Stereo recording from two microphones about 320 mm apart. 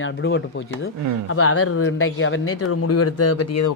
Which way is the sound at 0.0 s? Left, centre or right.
Left.